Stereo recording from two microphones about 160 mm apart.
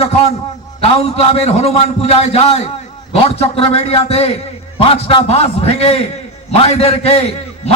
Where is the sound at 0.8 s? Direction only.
40° left (ahead or behind).